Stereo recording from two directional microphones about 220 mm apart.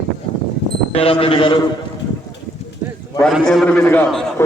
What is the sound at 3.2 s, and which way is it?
A man's voice, centre (ahead or behind).